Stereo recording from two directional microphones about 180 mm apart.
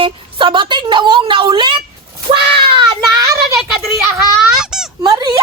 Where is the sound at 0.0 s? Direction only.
30° right (ahead or behind).